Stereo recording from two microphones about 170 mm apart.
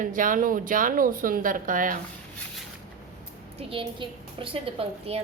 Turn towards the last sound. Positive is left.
turn(degrees=-35)  # may be behind; listen again after turning